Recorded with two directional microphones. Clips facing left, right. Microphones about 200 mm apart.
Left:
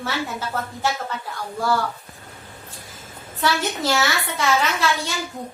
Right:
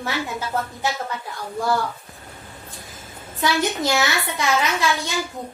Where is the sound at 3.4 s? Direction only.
15° right (ahead or behind).